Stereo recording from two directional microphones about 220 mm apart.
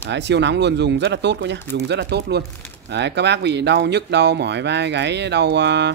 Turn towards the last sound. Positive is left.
turn(degrees=-50)  # may be behind; listen again after turning